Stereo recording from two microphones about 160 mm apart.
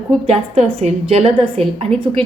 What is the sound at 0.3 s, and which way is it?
A woman's voice, 40° right (ahead or behind).